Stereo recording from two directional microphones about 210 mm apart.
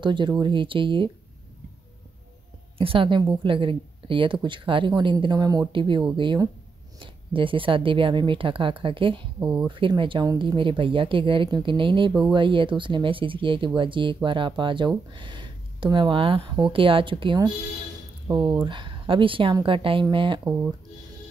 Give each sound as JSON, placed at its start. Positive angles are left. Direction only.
{"t": 0.0, "sound": "a woman's voice", "side_deg": -20}
{"t": 2.8, "sound": "a woman's voice", "side_deg": -25}